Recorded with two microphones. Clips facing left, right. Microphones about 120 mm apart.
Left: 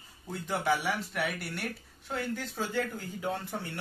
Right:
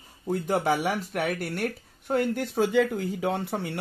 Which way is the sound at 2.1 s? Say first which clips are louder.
Right 9 dB; 65° right (ahead or behind).